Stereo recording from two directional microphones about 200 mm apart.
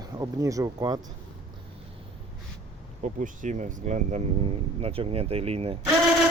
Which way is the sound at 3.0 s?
40° right (ahead or behind).